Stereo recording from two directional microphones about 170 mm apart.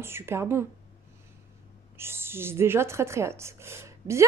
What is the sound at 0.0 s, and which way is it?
Speech, 15° right (ahead or behind).